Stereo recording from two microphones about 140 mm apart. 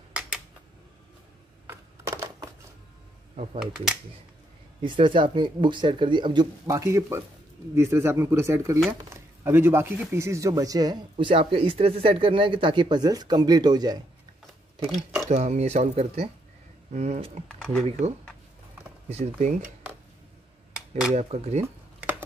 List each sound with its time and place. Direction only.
1.7 s a sound: 20° right (ahead or behind)
3.5 s speech: 5° right (ahead or behind)
4.8 s speech: 35° right (ahead or behind)
14.9 s speech: 5° right (ahead or behind)
15.3 s speech: 50° right (ahead or behind)
17.5 s speech: 5° left (ahead or behind)
19.0 s speech: 55° right (ahead or behind)
21.1 s speech: 55° right (ahead or behind)